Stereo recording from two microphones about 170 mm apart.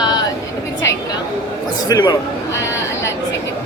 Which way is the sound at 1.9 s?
20° left (ahead or behind).